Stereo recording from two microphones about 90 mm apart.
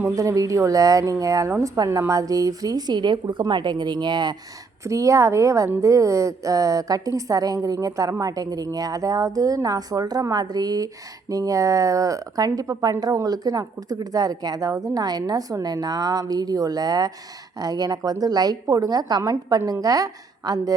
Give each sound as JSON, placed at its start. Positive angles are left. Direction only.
{"t": 0.2, "sound": "a woman's voice", "side_deg": -40}
{"t": 4.9, "sound": "a woman's voice", "side_deg": -35}